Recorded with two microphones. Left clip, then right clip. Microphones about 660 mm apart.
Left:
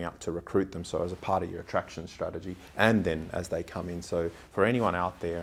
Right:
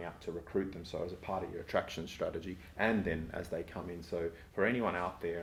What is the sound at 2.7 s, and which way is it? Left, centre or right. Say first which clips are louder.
Speech: left 8 dB; left.